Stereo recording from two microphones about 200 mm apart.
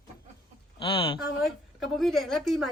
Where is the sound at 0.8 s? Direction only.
25° left (ahead or behind).